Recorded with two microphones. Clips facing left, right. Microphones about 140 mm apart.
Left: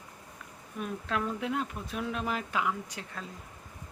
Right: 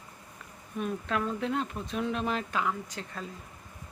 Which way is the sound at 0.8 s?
Centre (ahead or behind).